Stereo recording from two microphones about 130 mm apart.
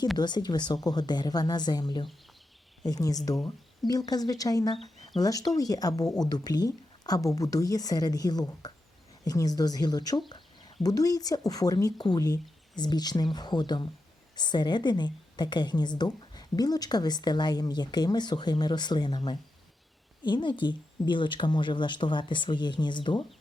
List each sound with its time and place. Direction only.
0.2 s a woman's voice: 35° left (ahead or behind)